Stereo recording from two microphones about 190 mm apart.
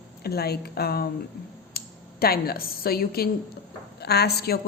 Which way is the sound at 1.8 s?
55° left (ahead or behind).